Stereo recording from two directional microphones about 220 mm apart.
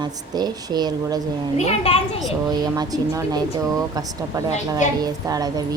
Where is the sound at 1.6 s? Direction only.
25° left (ahead or behind).